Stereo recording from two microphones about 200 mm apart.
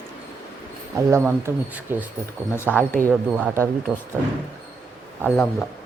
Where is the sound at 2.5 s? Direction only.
10° left (ahead or behind).